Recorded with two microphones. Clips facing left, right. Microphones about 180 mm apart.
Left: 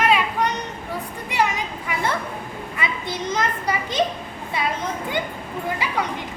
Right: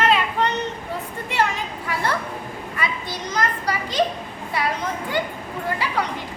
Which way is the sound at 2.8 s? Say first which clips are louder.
Left 1 dB; 20° left (ahead or behind).